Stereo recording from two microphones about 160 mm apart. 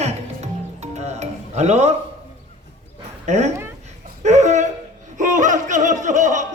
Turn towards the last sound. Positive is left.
turn(degrees=-50)  # may be behind; listen again after turning